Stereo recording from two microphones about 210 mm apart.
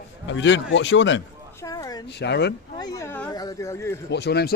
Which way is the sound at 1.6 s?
15° left (ahead or behind).